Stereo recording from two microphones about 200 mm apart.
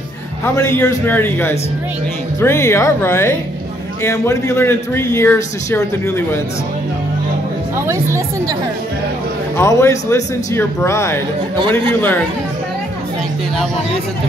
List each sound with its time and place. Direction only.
0.6 s a man's voice: 10° left (ahead or behind)
7.7 s speech: 15° right (ahead or behind)
9.6 s a man's voice: 15° left (ahead or behind)
11.5 s speech: 25° right (ahead or behind)